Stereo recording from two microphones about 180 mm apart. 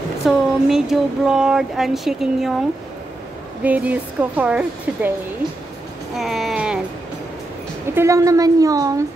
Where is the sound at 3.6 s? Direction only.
10° right (ahead or behind).